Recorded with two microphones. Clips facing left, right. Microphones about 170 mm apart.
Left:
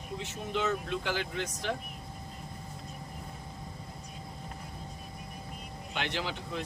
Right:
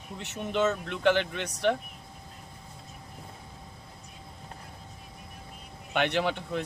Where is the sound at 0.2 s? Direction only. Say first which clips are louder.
Right 6 dB; 70° right (ahead or behind).